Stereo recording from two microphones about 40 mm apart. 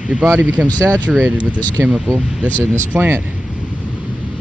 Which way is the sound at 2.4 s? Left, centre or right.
Left.